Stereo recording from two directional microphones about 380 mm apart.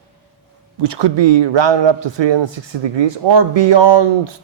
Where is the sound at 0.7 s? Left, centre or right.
Right.